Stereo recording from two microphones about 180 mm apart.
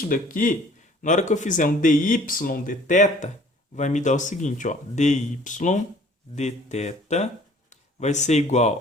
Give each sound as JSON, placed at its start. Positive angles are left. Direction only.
{"t": 0.1, "sound": "speech", "side_deg": 50}